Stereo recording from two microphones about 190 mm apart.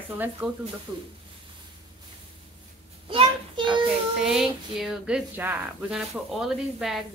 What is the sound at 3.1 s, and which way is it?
Speech, 25° right (ahead or behind).